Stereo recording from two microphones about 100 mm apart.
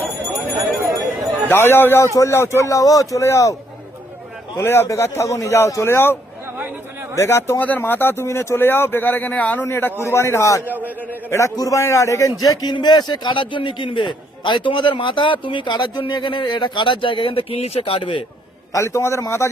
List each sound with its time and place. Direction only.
1.5 s speech: 25° left (ahead or behind)
4.5 s speech: 25° left (ahead or behind)
7.2 s speech: 25° left (ahead or behind)
10.7 s a man's voice: 15° right (ahead or behind)
11.3 s speech: 30° left (ahead or behind)
12.4 s a man's voice: 45° left (ahead or behind); by 18.2 s 65° left (ahead or behind)
18.7 s speech: 30° left (ahead or behind)